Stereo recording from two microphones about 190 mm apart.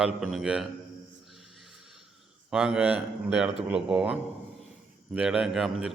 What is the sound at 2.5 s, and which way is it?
A man's voice, 5° right (ahead or behind).